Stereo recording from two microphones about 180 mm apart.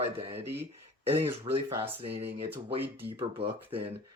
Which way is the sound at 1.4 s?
30° right (ahead or behind).